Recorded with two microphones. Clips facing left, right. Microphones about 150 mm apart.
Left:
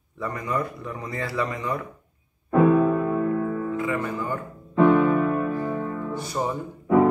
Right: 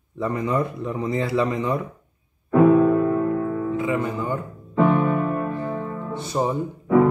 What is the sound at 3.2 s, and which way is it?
Music, 20° right (ahead or behind).